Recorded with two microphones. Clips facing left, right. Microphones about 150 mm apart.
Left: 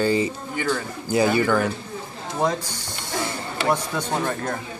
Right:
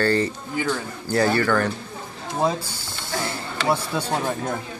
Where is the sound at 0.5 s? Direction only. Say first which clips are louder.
Even; 5° right (ahead or behind).